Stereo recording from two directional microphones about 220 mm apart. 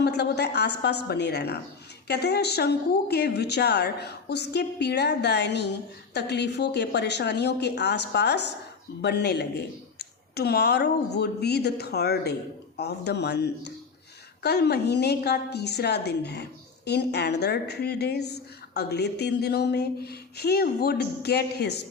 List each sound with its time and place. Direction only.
0.0 s a woman's voice: 50° left (ahead or behind)